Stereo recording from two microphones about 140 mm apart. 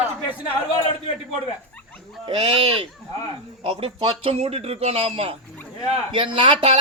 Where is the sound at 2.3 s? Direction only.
40° right (ahead or behind).